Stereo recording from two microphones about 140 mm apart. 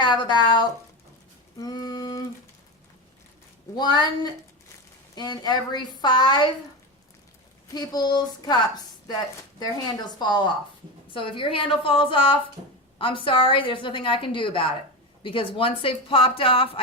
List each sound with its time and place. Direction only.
0.0 s a woman's voice: 30° left (ahead or behind)
1.5 s a sound: 30° left (ahead or behind)
3.8 s a woman's voice: 30° left (ahead or behind)
7.7 s a woman's voice: 30° left (ahead or behind)